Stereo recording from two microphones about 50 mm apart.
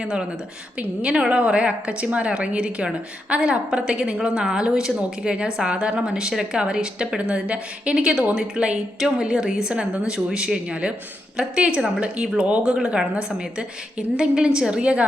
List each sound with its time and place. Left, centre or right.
0.0 s a woman's voice: centre